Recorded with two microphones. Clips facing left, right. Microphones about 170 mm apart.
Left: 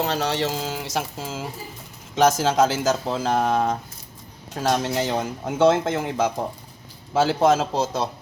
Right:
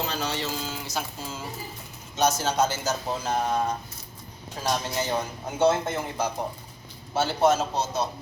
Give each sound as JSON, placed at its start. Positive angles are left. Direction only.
{"t": 0.0, "sound": "speech", "side_deg": 75}